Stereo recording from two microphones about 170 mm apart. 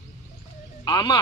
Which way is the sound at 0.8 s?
25° left (ahead or behind).